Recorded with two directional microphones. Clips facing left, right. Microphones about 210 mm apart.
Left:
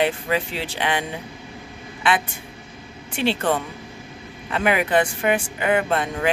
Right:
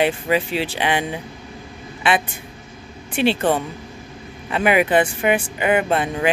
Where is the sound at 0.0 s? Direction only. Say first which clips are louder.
Right 3 dB; 15° right (ahead or behind).